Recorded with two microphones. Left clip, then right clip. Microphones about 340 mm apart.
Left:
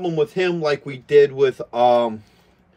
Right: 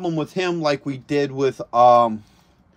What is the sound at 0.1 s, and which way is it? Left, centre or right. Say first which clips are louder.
Speech: left 3 dB; centre.